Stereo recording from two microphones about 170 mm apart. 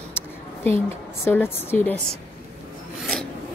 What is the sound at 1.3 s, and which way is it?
Speech, 10° left (ahead or behind).